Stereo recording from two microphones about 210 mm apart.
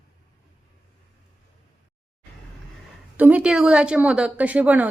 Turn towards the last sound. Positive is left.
turn(degrees=-5)  # may be behind; listen again after turning